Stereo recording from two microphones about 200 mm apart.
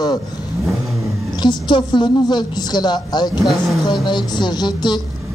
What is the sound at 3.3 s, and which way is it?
Speech, centre (ahead or behind).